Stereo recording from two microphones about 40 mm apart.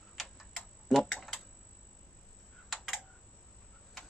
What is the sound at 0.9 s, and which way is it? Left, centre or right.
Speech, centre.